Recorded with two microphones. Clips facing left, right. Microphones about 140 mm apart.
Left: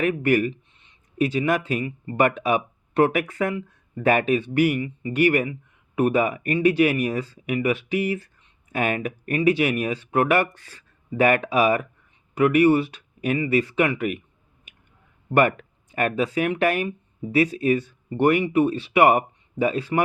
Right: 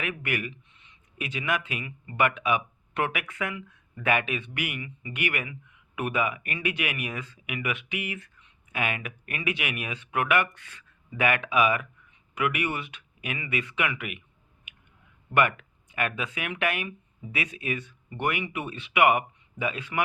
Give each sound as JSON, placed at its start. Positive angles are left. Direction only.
{"t": 0.0, "sound": "speech", "side_deg": 40}
{"t": 14.7, "sound": "clicking", "side_deg": 35}
{"t": 15.3, "sound": "speech", "side_deg": 40}